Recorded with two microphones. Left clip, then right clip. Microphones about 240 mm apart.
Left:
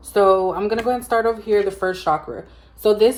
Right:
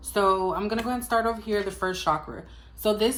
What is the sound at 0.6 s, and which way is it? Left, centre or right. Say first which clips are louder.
Speech: left 8 dB; centre.